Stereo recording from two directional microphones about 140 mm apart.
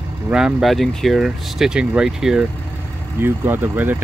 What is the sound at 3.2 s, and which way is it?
Speech, 15° right (ahead or behind).